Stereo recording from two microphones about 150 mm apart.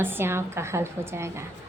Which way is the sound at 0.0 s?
15° right (ahead or behind).